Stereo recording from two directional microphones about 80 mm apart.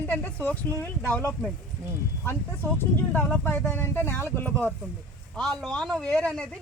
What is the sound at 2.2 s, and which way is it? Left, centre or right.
Speech, left.